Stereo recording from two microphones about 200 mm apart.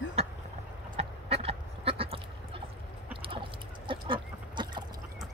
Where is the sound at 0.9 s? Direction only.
30° right (ahead or behind).